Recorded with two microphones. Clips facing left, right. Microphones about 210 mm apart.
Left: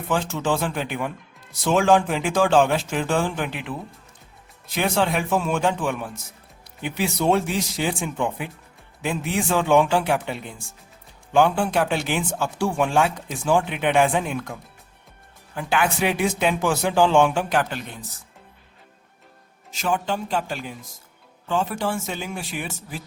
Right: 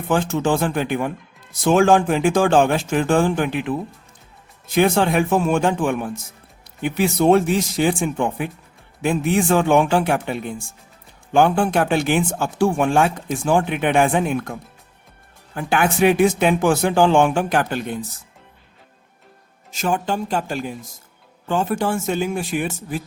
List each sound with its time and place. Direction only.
0.1 s speech: 50° right (ahead or behind)
11.3 s speech: 50° right (ahead or behind)
15.5 s speech: 50° right (ahead or behind)
19.7 s speech: 45° right (ahead or behind)